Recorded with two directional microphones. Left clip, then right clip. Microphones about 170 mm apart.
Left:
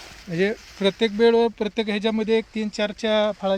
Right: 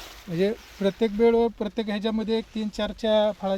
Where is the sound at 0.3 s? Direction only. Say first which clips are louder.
Left 2 dB; 35° left (ahead or behind).